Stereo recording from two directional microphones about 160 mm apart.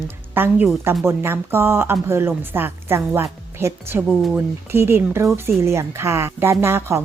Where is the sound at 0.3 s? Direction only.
15° right (ahead or behind).